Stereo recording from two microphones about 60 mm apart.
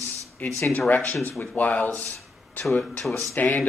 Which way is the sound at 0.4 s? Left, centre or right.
Left.